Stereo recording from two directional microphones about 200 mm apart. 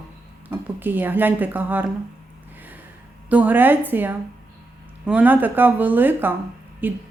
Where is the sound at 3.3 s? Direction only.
10° right (ahead or behind).